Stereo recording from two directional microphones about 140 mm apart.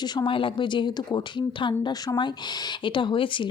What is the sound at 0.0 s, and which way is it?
A woman's voice, 30° left (ahead or behind).